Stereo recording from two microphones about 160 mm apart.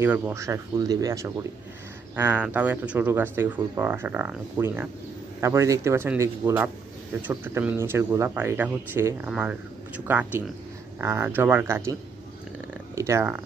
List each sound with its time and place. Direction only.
0.0 s speech: 10° right (ahead or behind)